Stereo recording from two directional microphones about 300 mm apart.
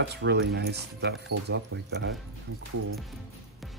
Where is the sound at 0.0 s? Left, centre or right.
Right.